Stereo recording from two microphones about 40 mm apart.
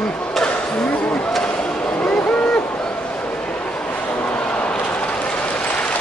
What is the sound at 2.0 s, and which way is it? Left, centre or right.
Owl, left.